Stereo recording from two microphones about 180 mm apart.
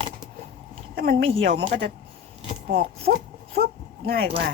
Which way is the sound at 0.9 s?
55° right (ahead or behind).